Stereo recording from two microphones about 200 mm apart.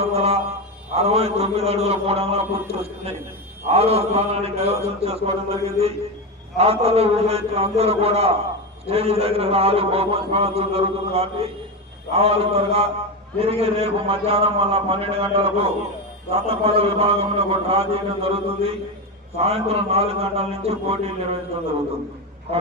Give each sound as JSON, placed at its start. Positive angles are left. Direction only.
{"t": 0.0, "sound": "a man's voice", "side_deg": -30}